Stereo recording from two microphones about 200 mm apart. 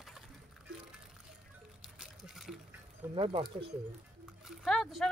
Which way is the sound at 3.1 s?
25° right (ahead or behind).